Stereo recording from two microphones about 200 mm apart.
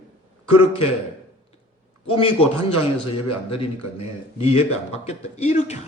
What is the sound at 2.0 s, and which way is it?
A man's voice, 25° left (ahead or behind).